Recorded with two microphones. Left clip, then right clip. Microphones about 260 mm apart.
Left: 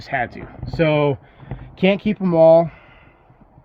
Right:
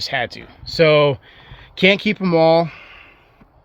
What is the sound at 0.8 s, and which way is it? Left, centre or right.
Speech, right.